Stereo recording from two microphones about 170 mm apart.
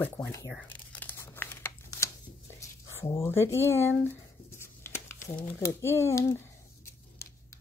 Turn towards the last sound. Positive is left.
turn(degrees=15)  # may be behind; listen again after turning